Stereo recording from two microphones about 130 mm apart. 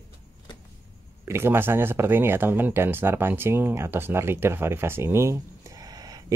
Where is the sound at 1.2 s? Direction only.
20° right (ahead or behind).